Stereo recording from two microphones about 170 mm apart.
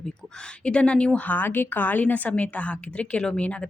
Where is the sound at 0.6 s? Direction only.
5° left (ahead or behind).